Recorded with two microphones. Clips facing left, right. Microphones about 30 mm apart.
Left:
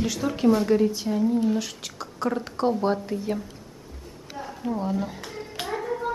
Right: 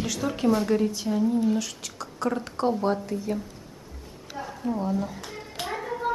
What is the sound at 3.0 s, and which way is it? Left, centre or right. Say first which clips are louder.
Speech: left 1 dB; centre.